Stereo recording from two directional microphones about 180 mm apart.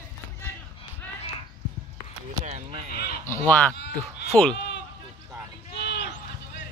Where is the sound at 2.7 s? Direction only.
35° right (ahead or behind).